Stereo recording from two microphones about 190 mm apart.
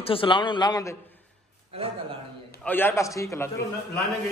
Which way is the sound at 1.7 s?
30° right (ahead or behind).